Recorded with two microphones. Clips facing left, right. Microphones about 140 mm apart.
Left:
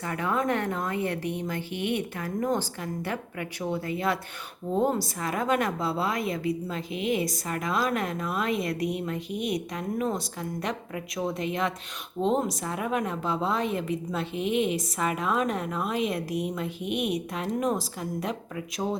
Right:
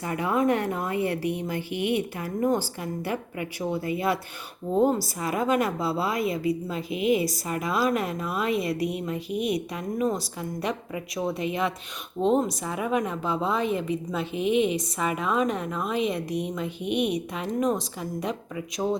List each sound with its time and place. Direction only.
0.0 s a woman's voice: 10° right (ahead or behind)